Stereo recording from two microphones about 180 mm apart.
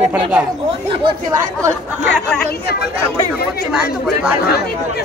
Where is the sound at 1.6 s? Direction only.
15° right (ahead or behind).